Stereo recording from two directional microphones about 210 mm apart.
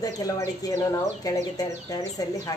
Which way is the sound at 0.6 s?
15° left (ahead or behind).